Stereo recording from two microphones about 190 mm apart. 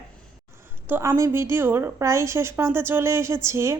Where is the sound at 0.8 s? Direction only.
10° right (ahead or behind).